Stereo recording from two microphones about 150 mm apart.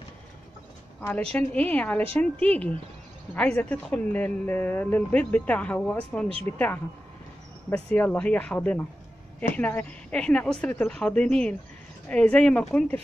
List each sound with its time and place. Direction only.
1.0 s speech: 10° left (ahead or behind)
6.2 s speech: 40° right (ahead or behind)
7.7 s speech: 10° left (ahead or behind)